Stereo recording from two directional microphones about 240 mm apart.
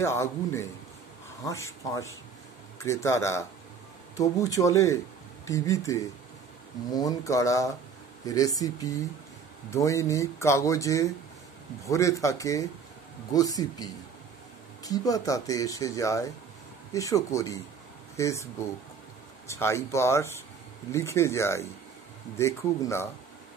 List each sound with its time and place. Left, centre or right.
0.0 s speech: centre